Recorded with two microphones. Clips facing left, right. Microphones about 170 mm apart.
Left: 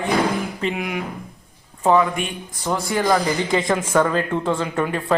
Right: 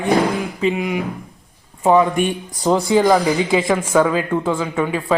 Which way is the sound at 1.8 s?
15° right (ahead or behind).